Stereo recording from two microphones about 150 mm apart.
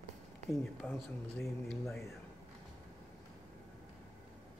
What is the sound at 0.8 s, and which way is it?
Speech, 15° left (ahead or behind).